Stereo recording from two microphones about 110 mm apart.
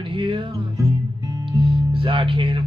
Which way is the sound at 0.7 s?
35° right (ahead or behind).